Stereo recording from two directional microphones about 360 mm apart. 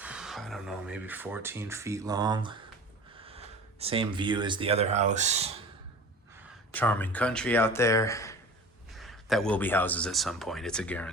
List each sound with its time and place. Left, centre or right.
0.0 s speech: centre
6.7 s speech: centre